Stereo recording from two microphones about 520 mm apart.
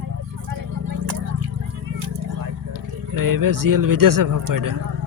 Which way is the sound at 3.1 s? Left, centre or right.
Right.